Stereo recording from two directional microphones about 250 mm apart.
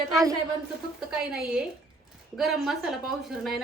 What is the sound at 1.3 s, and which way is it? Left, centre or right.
A woman's voice, centre.